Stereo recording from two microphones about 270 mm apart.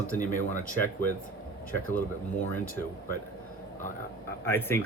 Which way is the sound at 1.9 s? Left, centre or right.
Centre.